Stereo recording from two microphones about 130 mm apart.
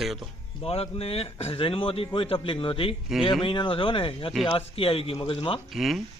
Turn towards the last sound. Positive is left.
turn(degrees=0)  # may be behind; listen again after turning